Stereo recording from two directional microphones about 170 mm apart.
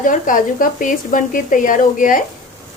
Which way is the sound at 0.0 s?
50° left (ahead or behind).